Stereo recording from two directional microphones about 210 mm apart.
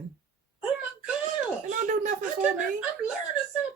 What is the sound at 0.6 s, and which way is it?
Speech, 5° right (ahead or behind).